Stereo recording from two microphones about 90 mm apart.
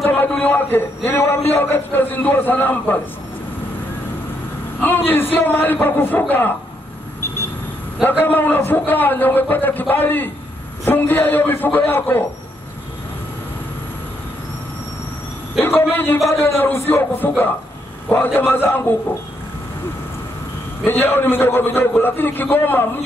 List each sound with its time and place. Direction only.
0.0 s a man's voice: 20° left (ahead or behind)
4.7 s a man's voice: 20° left (ahead or behind)
8.0 s a man's voice: 20° left (ahead or behind)
15.6 s a man's voice: 20° left (ahead or behind)
20.8 s a man's voice: 25° left (ahead or behind)